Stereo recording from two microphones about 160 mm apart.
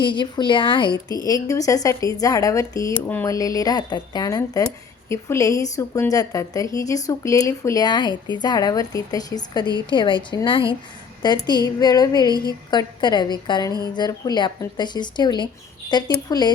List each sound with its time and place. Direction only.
0.0 s a woman's voice: 30° left (ahead or behind)